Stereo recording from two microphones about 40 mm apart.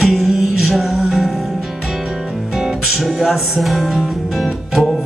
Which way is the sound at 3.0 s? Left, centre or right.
Centre.